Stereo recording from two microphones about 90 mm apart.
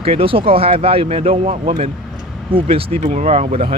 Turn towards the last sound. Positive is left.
turn(degrees=-90)